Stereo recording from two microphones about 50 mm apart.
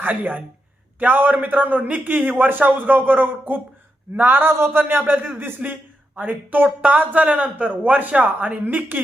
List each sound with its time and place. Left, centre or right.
0.0 s a man's voice: right
6.1 s a man's voice: right
8.6 s speech: right